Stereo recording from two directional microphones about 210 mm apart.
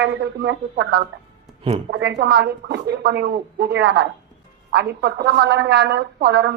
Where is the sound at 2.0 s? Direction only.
55° right (ahead or behind).